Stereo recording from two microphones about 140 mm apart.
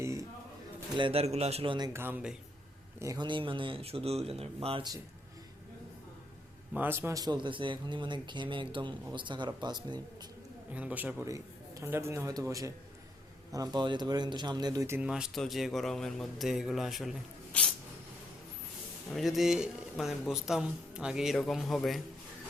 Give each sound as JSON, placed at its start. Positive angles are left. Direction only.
{"t": 0.0, "sound": "a sound", "side_deg": -20}
{"t": 0.9, "sound": "speech", "side_deg": -40}
{"t": 1.9, "sound": "a man's voice", "side_deg": -15}
{"t": 3.0, "sound": "a man's voice", "side_deg": -25}
{"t": 3.2, "sound": "speech", "side_deg": -35}
{"t": 6.7, "sound": "a man's voice", "side_deg": -15}
{"t": 10.7, "sound": "a man's voice", "side_deg": -10}
{"t": 11.3, "sound": "a man's voice", "side_deg": -20}
{"t": 15.1, "sound": "speech", "side_deg": 0}
{"t": 17.5, "sound": "a sound", "side_deg": 10}
{"t": 19.1, "sound": "speech", "side_deg": 0}